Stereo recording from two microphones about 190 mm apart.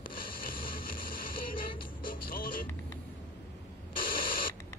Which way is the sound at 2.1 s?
45° left (ahead or behind).